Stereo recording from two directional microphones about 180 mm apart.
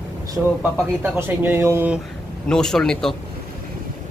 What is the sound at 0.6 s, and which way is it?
Speech, 10° right (ahead or behind).